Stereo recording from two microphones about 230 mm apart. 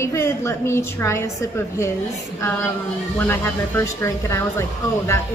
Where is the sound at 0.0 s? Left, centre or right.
Centre.